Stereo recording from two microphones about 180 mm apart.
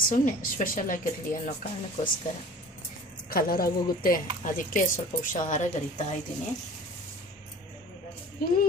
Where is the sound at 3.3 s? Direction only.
55° left (ahead or behind).